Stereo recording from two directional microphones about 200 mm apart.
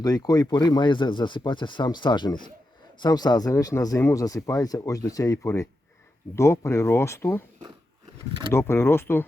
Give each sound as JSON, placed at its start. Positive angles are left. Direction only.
{"t": 0.0, "sound": "speech", "side_deg": 20}
{"t": 8.5, "sound": "speech", "side_deg": 10}